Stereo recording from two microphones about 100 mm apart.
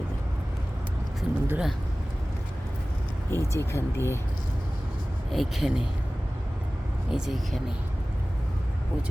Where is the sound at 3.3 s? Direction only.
25° left (ahead or behind).